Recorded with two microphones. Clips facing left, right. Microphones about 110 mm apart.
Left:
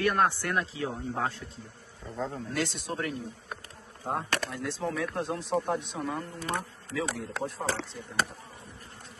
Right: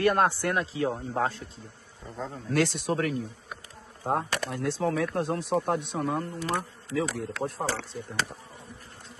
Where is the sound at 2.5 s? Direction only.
70° right (ahead or behind).